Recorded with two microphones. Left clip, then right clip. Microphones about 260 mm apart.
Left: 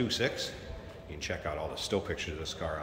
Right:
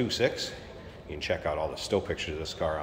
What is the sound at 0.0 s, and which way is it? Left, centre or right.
Speech, centre.